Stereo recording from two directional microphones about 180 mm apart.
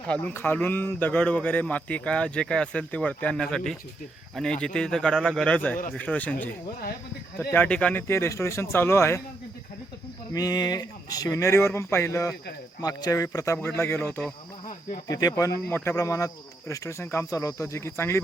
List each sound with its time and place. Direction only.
0.1 s a man's voice: 10° left (ahead or behind)
7.5 s speech: 10° left (ahead or behind)
10.3 s speech: 20° left (ahead or behind)